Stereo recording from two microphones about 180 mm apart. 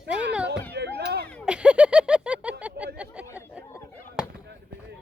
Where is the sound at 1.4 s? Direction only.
5° right (ahead or behind).